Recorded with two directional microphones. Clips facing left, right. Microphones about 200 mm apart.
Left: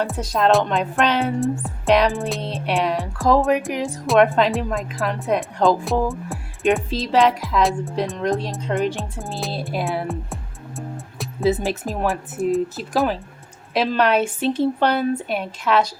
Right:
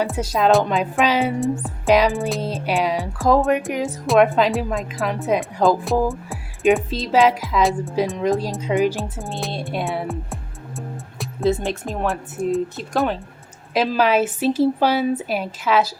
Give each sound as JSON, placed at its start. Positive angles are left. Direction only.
{"t": 0.0, "sound": "speech", "side_deg": 0}
{"t": 11.2, "sound": "speech", "side_deg": 0}